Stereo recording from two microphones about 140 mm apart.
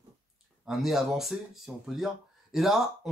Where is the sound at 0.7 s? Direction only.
Centre (ahead or behind).